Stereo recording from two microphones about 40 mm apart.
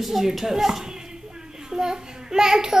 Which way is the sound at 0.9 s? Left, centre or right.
Centre.